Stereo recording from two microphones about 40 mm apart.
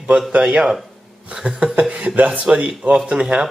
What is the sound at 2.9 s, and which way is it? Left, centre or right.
Speech, centre.